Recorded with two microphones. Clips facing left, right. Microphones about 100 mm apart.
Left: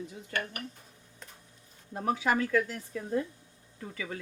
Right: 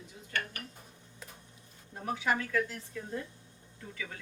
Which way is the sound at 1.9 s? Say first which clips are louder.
Left 4 dB; 80° left.